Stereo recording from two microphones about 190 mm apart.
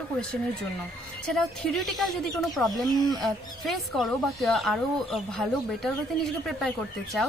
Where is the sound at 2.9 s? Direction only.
20° left (ahead or behind).